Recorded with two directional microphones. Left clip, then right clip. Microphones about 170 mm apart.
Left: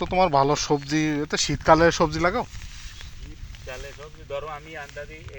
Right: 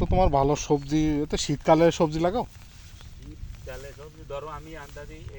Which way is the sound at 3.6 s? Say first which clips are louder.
Left 3 dB; 75° right (ahead or behind).